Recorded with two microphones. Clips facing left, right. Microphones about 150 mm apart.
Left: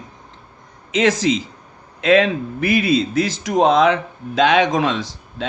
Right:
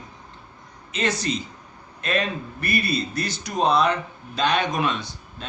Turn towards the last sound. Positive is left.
turn(degrees=90)